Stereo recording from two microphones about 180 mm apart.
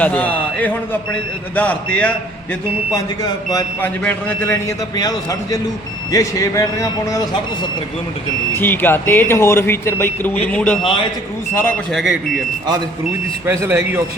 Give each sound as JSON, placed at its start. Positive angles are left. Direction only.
{"t": 0.0, "sound": "a man's voice", "side_deg": 10}
{"t": 2.9, "sound": "a man's voice", "side_deg": 20}
{"t": 8.5, "sound": "a man's voice", "side_deg": 10}
{"t": 13.4, "sound": "speech", "side_deg": -15}